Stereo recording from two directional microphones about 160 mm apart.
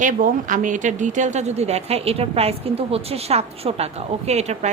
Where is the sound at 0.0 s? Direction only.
55° right (ahead or behind).